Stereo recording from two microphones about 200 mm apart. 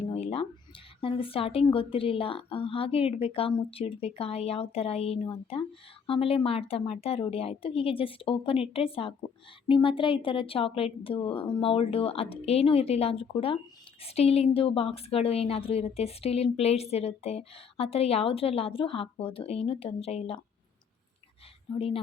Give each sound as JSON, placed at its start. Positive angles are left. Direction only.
{"t": 0.0, "sound": "a sound", "side_deg": 30}
{"t": 1.0, "sound": "a woman's voice", "side_deg": 30}
{"t": 21.8, "sound": "a woman's voice", "side_deg": 30}